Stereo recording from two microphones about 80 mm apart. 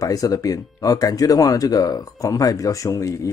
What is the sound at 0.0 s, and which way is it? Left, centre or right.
Speech, left.